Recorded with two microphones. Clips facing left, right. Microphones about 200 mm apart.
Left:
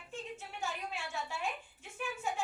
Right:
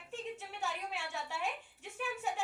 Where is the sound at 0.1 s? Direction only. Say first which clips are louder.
Right 2 dB; 70° right (ahead or behind).